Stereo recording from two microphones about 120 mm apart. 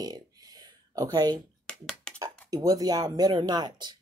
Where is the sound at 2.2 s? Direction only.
30° right (ahead or behind).